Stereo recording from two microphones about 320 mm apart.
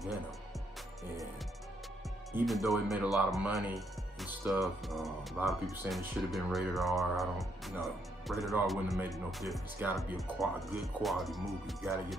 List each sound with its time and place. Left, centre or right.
2.3 s speech: centre